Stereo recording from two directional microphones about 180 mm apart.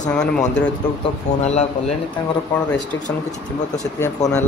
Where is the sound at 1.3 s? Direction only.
35° left (ahead or behind).